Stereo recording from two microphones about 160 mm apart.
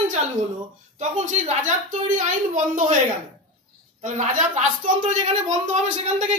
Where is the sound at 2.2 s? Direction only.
50° right (ahead or behind).